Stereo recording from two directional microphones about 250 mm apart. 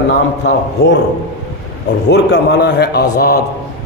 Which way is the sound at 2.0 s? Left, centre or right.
Left.